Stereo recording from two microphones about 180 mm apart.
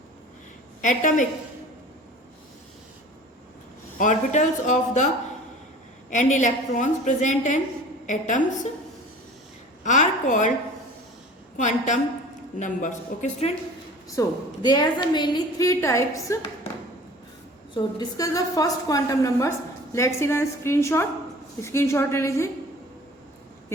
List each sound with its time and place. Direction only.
0.8 s a woman's voice: 45° left (ahead or behind)
3.9 s a woman's voice: 45° left (ahead or behind)
9.8 s a woman's voice: 45° left (ahead or behind)
11.5 s a woman's voice: 40° left (ahead or behind)
14.2 s a woman's voice: 25° left (ahead or behind)
17.7 s a woman's voice: 20° left (ahead or behind)